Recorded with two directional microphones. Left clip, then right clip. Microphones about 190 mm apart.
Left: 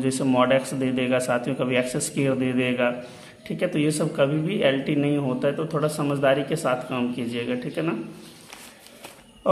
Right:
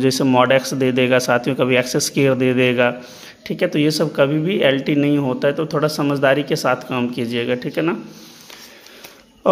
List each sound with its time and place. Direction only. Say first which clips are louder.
0.0 s speech: right 7 dB; 40° right (ahead or behind)